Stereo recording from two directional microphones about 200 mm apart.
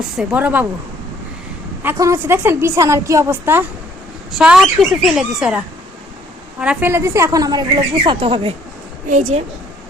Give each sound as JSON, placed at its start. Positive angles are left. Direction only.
{"t": 0.2, "sound": "a woman's voice", "side_deg": -5}
{"t": 1.8, "sound": "a woman's voice", "side_deg": -15}
{"t": 9.0, "sound": "speech", "side_deg": -40}